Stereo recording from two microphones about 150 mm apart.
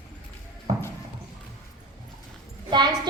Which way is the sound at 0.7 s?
50° right (ahead or behind).